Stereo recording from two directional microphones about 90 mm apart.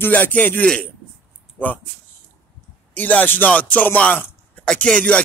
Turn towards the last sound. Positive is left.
turn(degrees=15)  # may be behind; listen again after turning